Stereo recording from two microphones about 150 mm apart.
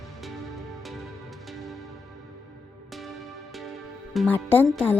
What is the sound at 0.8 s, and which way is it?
Music, centre (ahead or behind).